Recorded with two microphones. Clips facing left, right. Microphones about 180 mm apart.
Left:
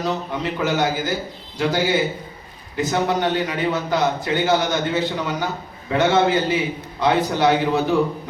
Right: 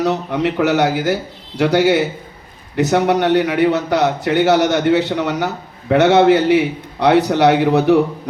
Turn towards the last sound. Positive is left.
turn(degrees=-70)  # may be behind; listen again after turning